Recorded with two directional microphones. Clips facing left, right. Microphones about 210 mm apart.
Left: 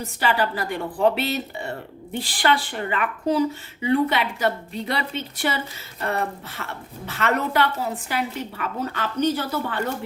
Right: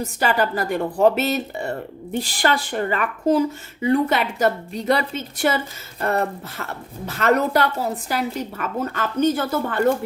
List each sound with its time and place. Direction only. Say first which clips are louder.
0.0 s a woman's voice: right 2 dB; 45° right (ahead or behind)
6.6 s a woman's voice: right 4 dB; 40° right (ahead or behind)